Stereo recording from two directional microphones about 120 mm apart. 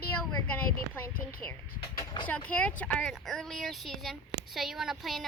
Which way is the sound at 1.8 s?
40° left (ahead or behind).